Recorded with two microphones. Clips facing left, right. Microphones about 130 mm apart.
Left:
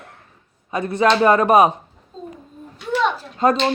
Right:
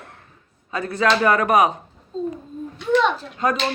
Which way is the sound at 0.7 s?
20° left (ahead or behind).